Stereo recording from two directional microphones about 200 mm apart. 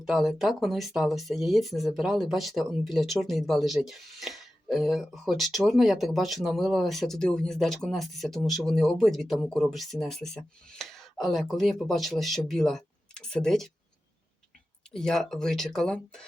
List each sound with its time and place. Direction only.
0.0 s speech: centre (ahead or behind)
14.9 s speech: centre (ahead or behind)